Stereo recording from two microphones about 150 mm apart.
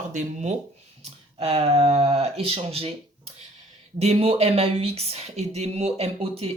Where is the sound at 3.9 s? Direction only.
45° right (ahead or behind).